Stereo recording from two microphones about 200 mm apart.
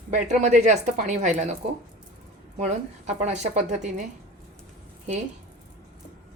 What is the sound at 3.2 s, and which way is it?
Speech, 35° right (ahead or behind).